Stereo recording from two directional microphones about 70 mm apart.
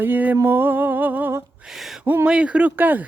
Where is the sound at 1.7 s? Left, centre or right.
Centre.